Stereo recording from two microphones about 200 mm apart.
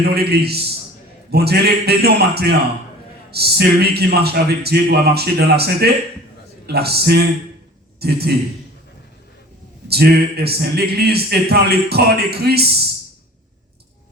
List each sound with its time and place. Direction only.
0.0 s a man's voice: 50° right (ahead or behind)
9.9 s speech: 50° right (ahead or behind)